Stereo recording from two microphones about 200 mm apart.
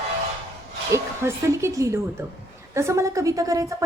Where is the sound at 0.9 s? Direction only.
15° right (ahead or behind).